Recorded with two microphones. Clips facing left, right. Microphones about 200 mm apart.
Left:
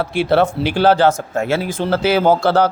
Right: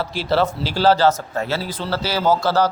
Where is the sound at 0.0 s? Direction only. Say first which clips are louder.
Left 5 dB; 60° left (ahead or behind).